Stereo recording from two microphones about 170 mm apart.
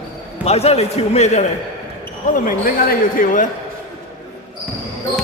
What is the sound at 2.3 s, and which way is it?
Speech, 55° left (ahead or behind).